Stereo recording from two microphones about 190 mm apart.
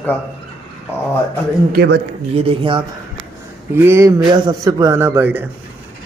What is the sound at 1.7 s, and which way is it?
Speech, 55° right (ahead or behind).